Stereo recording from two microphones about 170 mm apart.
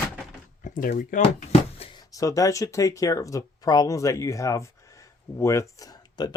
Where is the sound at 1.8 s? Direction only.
30° left (ahead or behind).